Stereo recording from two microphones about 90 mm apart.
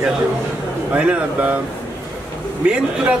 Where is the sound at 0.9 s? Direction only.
15° right (ahead or behind).